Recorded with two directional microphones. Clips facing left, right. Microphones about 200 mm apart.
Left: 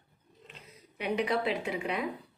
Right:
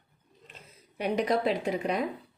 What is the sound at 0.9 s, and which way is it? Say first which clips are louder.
A woman's voice: right 3 dB; 40° right (ahead or behind).